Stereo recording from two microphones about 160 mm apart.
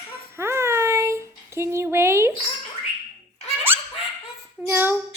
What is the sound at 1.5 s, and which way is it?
Speech, 15° right (ahead or behind).